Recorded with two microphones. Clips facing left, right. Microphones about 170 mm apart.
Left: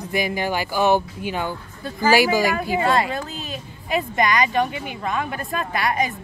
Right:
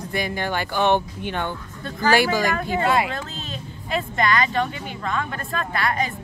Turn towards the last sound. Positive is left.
turn(degrees=15)  # may be behind; listen again after turning